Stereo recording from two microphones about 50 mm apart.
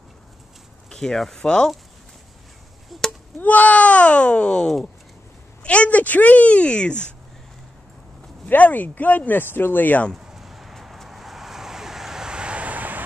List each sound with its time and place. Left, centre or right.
0.8 s speech: centre
3.1 s speech: left
8.5 s speech: left
10.1 s vehicle: centre; by 13.0 s right